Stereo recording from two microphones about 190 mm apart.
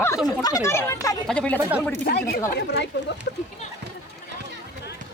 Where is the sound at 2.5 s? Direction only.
65° left (ahead or behind).